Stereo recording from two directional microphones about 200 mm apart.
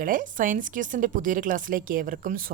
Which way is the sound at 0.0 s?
40° right (ahead or behind).